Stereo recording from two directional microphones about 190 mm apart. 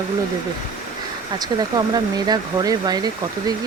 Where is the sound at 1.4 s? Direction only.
20° right (ahead or behind).